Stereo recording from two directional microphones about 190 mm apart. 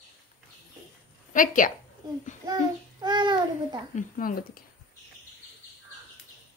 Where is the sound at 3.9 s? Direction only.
50° left (ahead or behind).